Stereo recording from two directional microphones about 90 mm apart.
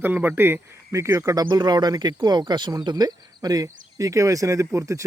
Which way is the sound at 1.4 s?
55° right (ahead or behind).